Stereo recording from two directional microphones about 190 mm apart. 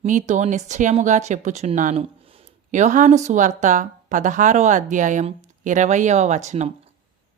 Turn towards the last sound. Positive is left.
turn(degrees=-35)  # may be behind; listen again after turning